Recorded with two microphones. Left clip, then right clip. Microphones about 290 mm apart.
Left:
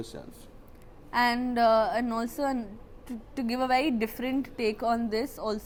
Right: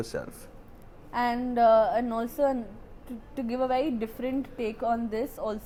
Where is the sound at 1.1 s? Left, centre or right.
Left.